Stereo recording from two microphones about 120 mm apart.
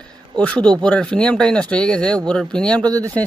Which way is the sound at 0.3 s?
10° left (ahead or behind).